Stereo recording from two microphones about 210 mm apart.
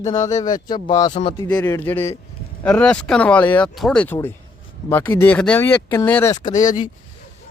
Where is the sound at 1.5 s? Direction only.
10° left (ahead or behind).